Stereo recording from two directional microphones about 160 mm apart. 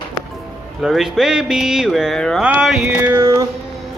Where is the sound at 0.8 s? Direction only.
5° right (ahead or behind); by 3.5 s 20° right (ahead or behind).